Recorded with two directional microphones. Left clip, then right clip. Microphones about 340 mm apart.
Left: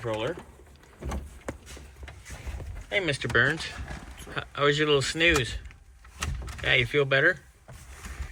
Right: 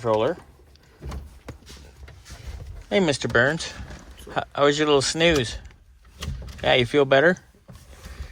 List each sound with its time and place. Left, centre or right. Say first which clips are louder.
0.0 s speech: right 9 dB; centre
3.0 s speech: right 4 dB; centre
6.7 s speech: right 5 dB; centre